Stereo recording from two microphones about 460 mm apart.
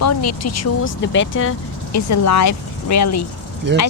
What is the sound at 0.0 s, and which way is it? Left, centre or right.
Speech, left.